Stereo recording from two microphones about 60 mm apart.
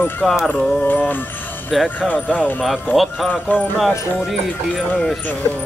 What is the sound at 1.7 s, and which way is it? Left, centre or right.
Speech, centre.